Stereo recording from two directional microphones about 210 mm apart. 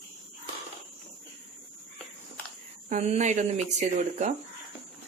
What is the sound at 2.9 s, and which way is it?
Speech, 35° right (ahead or behind).